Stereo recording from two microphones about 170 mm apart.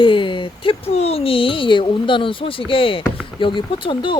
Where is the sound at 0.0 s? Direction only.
30° left (ahead or behind).